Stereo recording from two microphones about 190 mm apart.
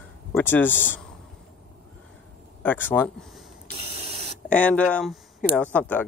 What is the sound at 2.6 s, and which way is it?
Speech, 10° left (ahead or behind).